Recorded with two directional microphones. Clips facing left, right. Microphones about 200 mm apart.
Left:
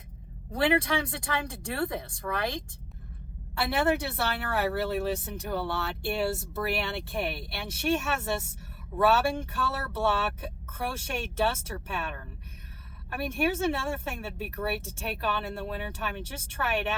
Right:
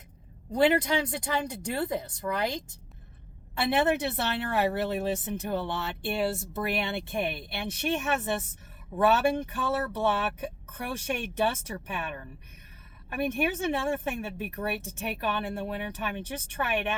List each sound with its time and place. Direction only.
0.5 s speech: 20° right (ahead or behind)
3.6 s speech: 20° right (ahead or behind)
13.1 s speech: 15° right (ahead or behind)